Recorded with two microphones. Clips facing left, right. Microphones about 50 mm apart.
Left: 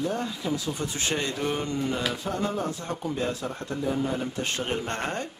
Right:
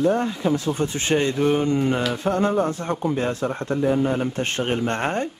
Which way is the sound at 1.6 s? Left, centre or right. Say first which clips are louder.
Right 8 dB; right.